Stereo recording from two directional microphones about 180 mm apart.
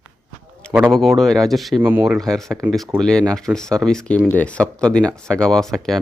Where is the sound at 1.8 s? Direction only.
10° right (ahead or behind).